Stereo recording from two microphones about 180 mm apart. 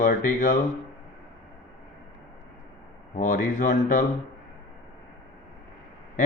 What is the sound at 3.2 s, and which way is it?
Speech, 45° left (ahead or behind).